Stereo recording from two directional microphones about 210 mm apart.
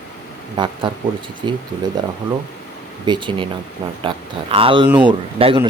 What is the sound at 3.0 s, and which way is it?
Speech, 20° right (ahead or behind).